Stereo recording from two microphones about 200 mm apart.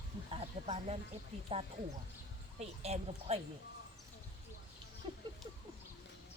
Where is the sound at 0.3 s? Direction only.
30° right (ahead or behind).